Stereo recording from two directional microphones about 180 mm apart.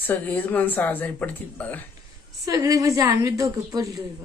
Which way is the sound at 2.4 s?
20° right (ahead or behind).